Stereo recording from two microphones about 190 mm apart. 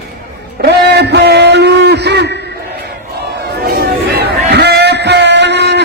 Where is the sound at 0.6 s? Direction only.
60° right (ahead or behind).